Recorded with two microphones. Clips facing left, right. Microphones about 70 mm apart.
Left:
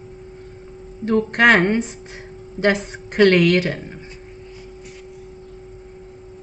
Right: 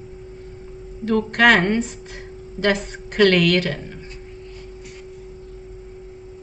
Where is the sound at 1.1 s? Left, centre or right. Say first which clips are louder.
Left 1 dB; left.